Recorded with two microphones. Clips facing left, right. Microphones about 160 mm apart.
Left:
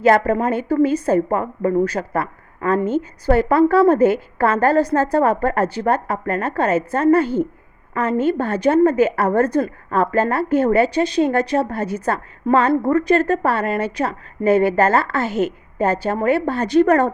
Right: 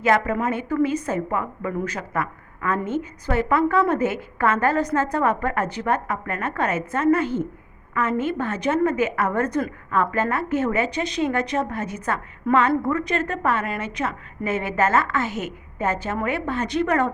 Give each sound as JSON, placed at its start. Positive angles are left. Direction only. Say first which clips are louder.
{"t": 0.0, "sound": "a woman's voice", "louder": "left 5 dB", "side_deg": 35}